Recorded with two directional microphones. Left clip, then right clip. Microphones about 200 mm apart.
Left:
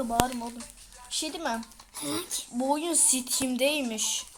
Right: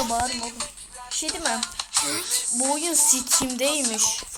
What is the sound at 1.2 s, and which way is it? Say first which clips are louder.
Speech: right 5 dB; centre (ahead or behind).